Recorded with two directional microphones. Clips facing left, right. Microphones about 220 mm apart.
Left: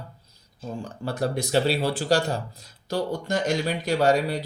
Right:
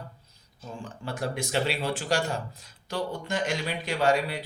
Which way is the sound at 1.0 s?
40° left (ahead or behind).